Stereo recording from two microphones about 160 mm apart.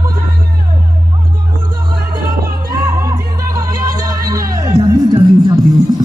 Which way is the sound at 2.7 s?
20° right (ahead or behind).